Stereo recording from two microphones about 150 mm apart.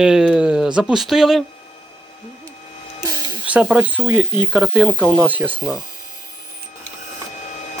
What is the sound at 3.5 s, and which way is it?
Speech, 10° right (ahead or behind).